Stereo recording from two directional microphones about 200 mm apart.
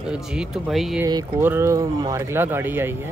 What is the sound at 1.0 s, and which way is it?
Speech, 15° right (ahead or behind).